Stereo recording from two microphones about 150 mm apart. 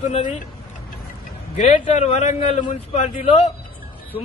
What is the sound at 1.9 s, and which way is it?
A man's voice, 50° left (ahead or behind).